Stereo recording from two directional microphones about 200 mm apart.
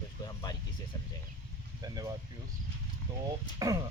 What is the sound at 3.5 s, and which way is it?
Speech, 15° right (ahead or behind).